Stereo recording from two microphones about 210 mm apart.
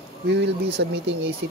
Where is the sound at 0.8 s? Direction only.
55° right (ahead or behind).